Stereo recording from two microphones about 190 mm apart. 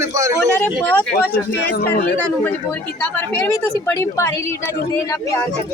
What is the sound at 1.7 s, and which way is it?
Speech, 55° left (ahead or behind).